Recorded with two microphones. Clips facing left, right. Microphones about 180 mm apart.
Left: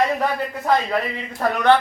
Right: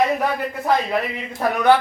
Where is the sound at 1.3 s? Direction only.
10° right (ahead or behind).